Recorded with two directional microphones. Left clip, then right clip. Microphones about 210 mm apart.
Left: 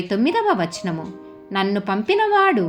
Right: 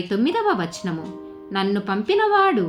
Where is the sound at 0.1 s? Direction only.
20° left (ahead or behind).